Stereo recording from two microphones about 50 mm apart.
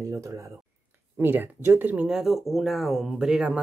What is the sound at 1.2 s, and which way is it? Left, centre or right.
Speech, right.